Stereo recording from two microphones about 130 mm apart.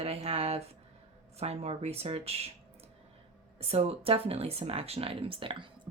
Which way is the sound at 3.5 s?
50° right (ahead or behind).